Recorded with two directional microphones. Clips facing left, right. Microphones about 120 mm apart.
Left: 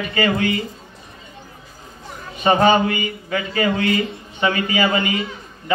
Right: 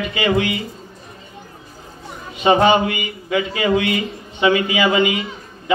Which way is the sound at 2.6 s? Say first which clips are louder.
Even; 40° left (ahead or behind).